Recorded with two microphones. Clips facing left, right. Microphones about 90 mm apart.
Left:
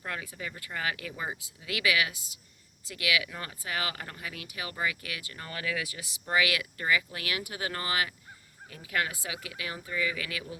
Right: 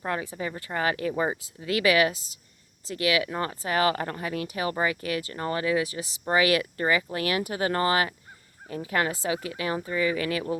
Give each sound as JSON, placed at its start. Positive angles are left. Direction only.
{"t": 0.0, "sound": "speech", "side_deg": -30}